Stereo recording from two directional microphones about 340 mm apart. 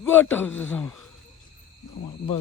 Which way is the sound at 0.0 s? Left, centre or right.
Centre.